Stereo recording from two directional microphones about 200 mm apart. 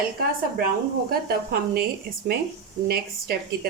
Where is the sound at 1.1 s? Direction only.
50° right (ahead or behind).